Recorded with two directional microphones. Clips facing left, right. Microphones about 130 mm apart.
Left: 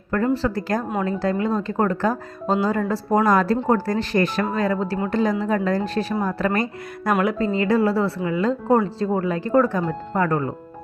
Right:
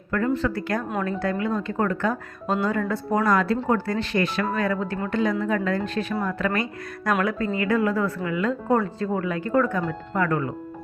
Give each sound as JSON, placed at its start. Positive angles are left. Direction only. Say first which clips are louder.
{"t": 0.4, "sound": "speech", "louder": "left 3 dB", "side_deg": 35}
{"t": 7.2, "sound": "speech", "louder": "left 4 dB", "side_deg": 25}